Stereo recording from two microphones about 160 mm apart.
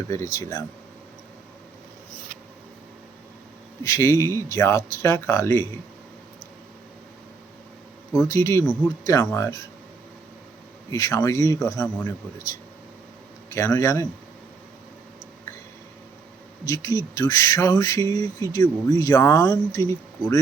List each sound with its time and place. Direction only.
0.1 s speech: 20° left (ahead or behind)
3.8 s speech: 20° left (ahead or behind)
8.3 s speech: 20° left (ahead or behind)
10.9 s speech: 20° left (ahead or behind)
13.5 s speech: 20° left (ahead or behind)
16.6 s speech: 20° left (ahead or behind)